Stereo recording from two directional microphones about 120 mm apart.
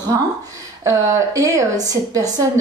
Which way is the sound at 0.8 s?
25° right (ahead or behind).